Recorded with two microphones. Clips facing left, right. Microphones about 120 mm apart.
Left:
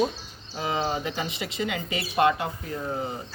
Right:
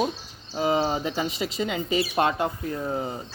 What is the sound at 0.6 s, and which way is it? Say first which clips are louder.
Speech: right 4 dB; 30° right (ahead or behind).